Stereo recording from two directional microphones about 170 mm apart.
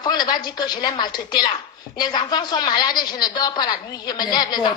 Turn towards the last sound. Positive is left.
turn(degrees=25)  # may be behind; listen again after turning